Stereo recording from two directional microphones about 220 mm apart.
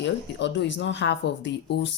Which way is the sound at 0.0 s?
55° left (ahead or behind).